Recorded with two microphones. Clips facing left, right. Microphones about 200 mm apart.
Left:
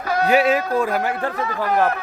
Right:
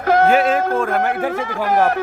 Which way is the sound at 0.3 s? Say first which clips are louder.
Right 1 dB; 5° left (ahead or behind).